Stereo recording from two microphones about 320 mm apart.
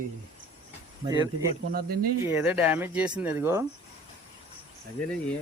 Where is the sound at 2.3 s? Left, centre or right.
Centre.